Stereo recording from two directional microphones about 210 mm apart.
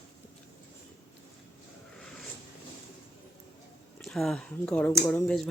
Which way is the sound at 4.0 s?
Centre (ahead or behind).